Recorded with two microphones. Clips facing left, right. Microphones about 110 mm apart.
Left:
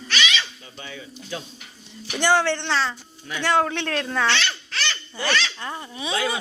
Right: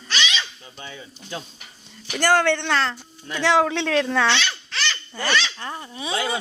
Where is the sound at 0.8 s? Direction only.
25° right (ahead or behind).